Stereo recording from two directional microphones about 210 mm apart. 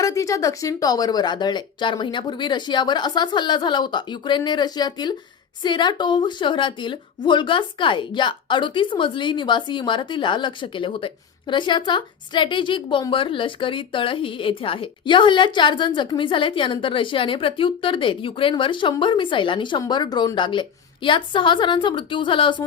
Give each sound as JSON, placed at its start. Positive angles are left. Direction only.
{"t": 0.0, "sound": "a woman's voice", "side_deg": 15}